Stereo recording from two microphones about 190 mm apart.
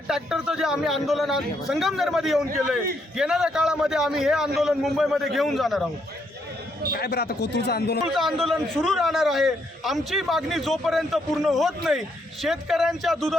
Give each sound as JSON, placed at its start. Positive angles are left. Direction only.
{"t": 0.1, "sound": "a man's voice", "side_deg": -5}
{"t": 6.9, "sound": "a man's voice", "side_deg": 55}
{"t": 8.0, "sound": "a man's voice", "side_deg": 0}